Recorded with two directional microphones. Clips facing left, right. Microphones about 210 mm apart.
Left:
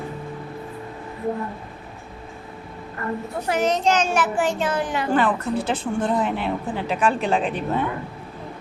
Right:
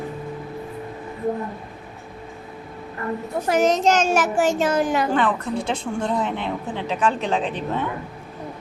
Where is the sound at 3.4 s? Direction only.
45° right (ahead or behind).